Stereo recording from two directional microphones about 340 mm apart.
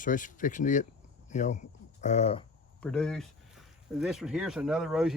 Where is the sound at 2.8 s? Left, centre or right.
Centre.